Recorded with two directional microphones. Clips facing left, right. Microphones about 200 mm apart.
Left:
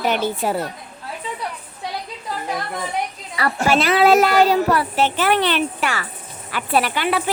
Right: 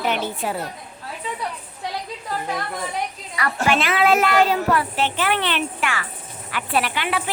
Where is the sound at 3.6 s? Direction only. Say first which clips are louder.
Left 4 dB; 40° left (ahead or behind).